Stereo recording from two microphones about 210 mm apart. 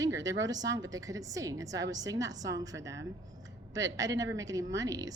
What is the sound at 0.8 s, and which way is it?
Speech, 15° right (ahead or behind).